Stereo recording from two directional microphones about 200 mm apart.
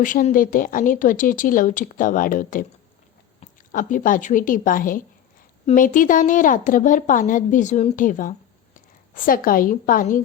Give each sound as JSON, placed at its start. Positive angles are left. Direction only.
{"t": 0.0, "sound": "a woman's voice", "side_deg": 40}